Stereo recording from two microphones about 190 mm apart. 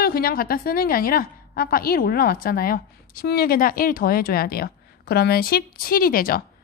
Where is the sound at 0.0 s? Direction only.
50° left (ahead or behind).